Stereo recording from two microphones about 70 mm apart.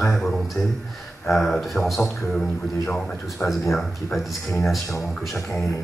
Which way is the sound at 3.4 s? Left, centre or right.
Left.